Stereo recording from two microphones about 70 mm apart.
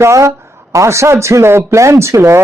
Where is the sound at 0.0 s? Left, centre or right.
Right.